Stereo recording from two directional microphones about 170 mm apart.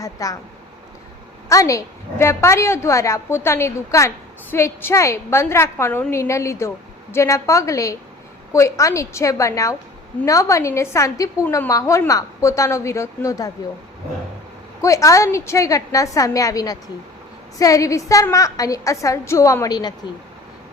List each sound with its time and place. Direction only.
0.0 s a woman's voice: 20° left (ahead or behind)
1.5 s a woman's voice: 20° left (ahead or behind)
14.8 s a woman's voice: 20° left (ahead or behind)